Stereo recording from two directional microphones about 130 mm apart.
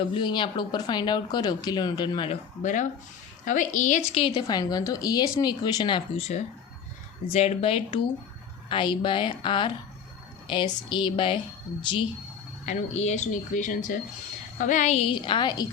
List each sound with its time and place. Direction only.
0.1 s speech: 35° left (ahead or behind)
3.4 s a woman's voice: 80° left
4.4 s a woman's voice: 30° left (ahead or behind)
6.1 s speech: 55° left (ahead or behind); by 12.0 s 40° left (ahead or behind)
12.6 s a woman's voice: 60° left (ahead or behind)
14.9 s speech: 45° left (ahead or behind)